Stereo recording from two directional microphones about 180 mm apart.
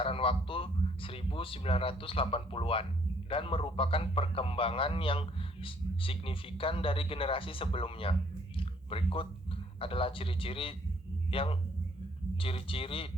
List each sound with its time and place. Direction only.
0.0 s a man's voice: 30° left (ahead or behind)